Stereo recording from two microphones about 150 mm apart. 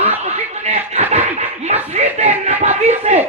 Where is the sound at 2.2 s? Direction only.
45° right (ahead or behind).